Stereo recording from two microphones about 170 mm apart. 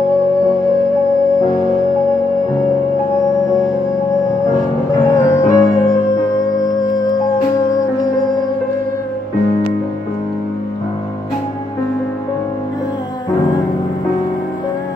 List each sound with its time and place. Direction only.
5.1 s music: 20° left (ahead or behind)